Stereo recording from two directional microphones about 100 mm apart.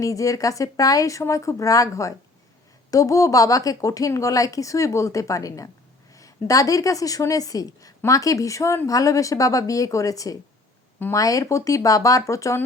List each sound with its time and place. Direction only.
0.0 s a woman's voice: 35° left (ahead or behind)